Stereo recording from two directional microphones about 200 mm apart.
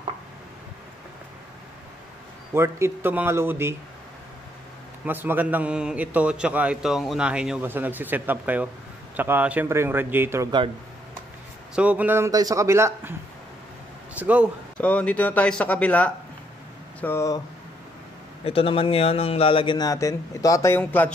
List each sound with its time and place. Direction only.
2.5 s a man's voice: 15° right (ahead or behind)
5.0 s a man's voice: 10° right (ahead or behind)
11.7 s a man's voice: 5° right (ahead or behind)
14.1 s a man's voice: 5° right (ahead or behind)
14.8 s speech: 5° left (ahead or behind)
18.4 s a man's voice: 30° left (ahead or behind); by 21.1 s 10° left (ahead or behind)